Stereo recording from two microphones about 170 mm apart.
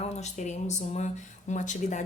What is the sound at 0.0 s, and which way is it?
Speech, 40° left (ahead or behind).